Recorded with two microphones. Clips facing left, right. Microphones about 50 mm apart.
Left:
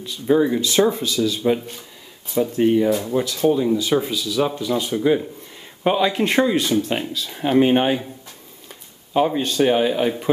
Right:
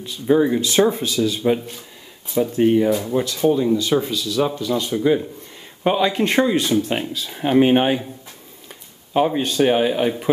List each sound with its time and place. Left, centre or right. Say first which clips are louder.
0.3 s a man's voice: right 1 dB; centre
2.3 s a man's voice: right 1 dB; centre
9.1 s a man's voice: right 1 dB; centre